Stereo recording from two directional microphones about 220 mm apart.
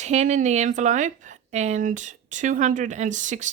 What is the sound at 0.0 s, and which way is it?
A woman's voice, 30° right (ahead or behind).